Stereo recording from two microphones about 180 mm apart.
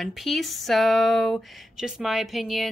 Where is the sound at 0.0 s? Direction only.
Centre (ahead or behind).